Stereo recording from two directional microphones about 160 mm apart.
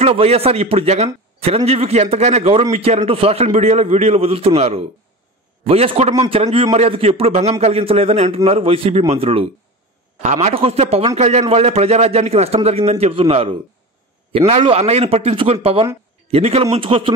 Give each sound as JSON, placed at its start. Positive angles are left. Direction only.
{"t": 0.0, "sound": "a man's voice", "side_deg": -40}